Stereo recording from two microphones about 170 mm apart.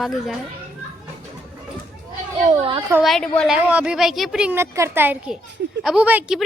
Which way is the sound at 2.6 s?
30° right (ahead or behind).